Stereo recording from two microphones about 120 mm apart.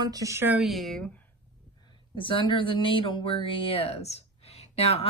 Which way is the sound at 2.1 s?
45° left (ahead or behind).